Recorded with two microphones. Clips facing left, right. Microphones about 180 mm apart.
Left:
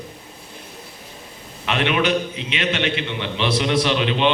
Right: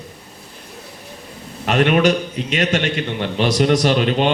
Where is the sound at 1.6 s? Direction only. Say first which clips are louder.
Right 5 dB; 45° right (ahead or behind).